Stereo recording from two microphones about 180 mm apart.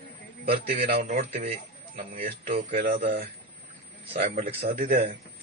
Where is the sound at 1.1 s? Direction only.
35° right (ahead or behind).